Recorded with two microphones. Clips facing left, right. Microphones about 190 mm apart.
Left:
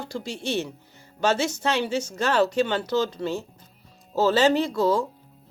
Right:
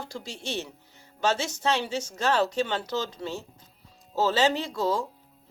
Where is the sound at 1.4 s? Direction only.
60° left (ahead or behind).